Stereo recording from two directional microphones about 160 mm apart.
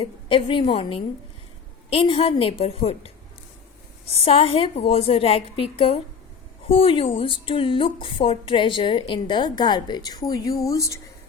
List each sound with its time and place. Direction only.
0.0 s a woman's voice: 35° left (ahead or behind)
4.2 s a woman's voice: 35° left (ahead or behind); by 11.0 s 20° left (ahead or behind)